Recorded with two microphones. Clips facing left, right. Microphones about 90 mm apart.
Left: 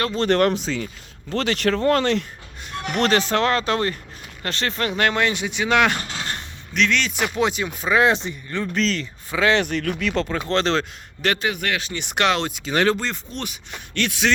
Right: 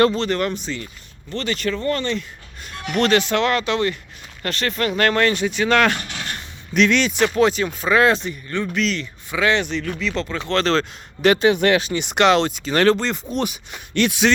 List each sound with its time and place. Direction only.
0.3 s speech: 60° left (ahead or behind); by 2.2 s 90° left
2.8 s speech: 35° left (ahead or behind)
4.4 s speech: 25° left (ahead or behind)
6.0 s a sound: 30° left (ahead or behind)
6.7 s speech: 5° right (ahead or behind)
7.2 s speech: 15° left (ahead or behind)
8.7 s speech: 35° left (ahead or behind)
9.6 s speech: 55° left (ahead or behind)
10.5 s speech: 20° left (ahead or behind)
11.3 s speech: 25° right (ahead or behind)
11.9 s speech: centre (ahead or behind)
12.6 s speech: 10° left (ahead or behind)
13.3 s speech: 10° right (ahead or behind)